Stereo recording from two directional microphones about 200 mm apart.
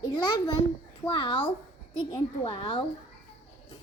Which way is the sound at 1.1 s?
25° left (ahead or behind).